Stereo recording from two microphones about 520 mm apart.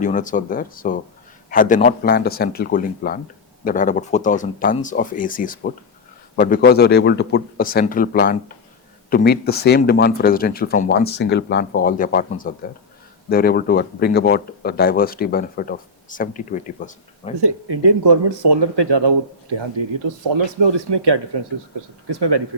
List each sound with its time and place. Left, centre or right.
0.0 s speech: centre
17.4 s speech: right